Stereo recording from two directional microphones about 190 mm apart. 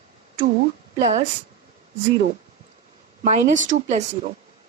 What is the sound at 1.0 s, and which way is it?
Speech, 35° right (ahead or behind).